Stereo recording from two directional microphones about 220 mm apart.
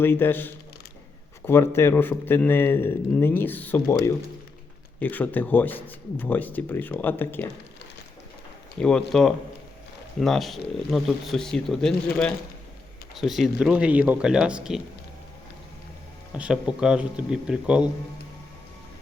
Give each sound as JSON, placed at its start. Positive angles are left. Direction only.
{"t": 0.0, "sound": "a man's voice", "side_deg": 10}
{"t": 4.9, "sound": "a man's voice", "side_deg": 10}
{"t": 8.8, "sound": "speech", "side_deg": 5}
{"t": 16.4, "sound": "speech", "side_deg": -5}